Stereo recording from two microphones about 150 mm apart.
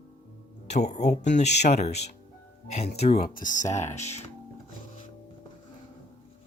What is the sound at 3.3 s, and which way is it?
Speech, 60° left (ahead or behind).